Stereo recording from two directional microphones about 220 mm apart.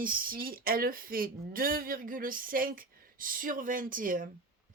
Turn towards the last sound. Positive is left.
turn(degrees=-40)  # may be behind; listen again after turning